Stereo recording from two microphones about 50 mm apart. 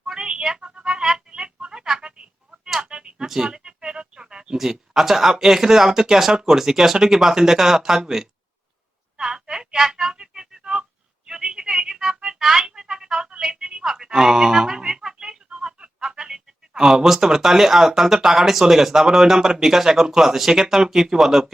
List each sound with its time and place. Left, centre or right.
0.1 s a sound: centre
3.2 s speech: centre
9.1 s music: centre
15.4 s speech: centre